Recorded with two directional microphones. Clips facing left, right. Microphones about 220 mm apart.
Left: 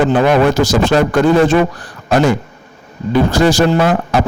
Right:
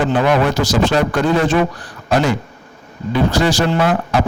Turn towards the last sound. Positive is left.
turn(degrees=40)  # may be behind; listen again after turning